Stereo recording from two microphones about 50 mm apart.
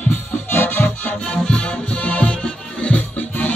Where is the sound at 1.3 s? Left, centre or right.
Centre.